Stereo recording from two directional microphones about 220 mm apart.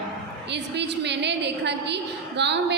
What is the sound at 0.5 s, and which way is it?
A woman's voice, 50° right (ahead or behind).